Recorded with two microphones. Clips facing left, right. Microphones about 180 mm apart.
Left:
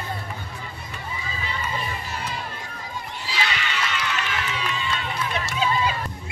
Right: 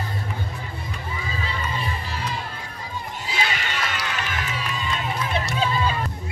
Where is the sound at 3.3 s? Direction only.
45° right (ahead or behind).